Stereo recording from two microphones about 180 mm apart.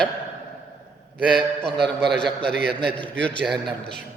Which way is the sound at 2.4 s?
65° right (ahead or behind).